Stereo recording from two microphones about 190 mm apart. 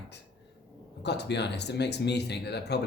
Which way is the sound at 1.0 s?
65° left (ahead or behind).